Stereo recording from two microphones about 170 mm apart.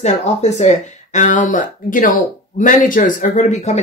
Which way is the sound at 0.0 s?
40° left (ahead or behind).